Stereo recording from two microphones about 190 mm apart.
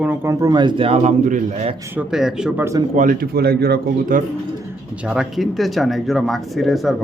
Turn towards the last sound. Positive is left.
turn(degrees=0)  # may be behind; listen again after turning